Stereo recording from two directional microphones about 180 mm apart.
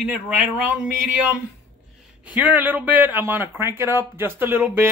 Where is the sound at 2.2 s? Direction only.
10° right (ahead or behind).